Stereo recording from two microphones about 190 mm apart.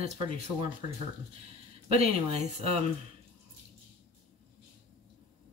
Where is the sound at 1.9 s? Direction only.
35° right (ahead or behind).